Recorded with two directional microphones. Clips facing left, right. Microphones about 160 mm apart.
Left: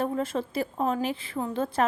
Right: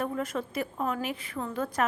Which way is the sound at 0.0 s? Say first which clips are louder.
Left 3 dB; 30° left (ahead or behind).